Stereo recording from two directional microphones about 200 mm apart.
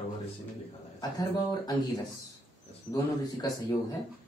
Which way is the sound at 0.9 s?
20° left (ahead or behind).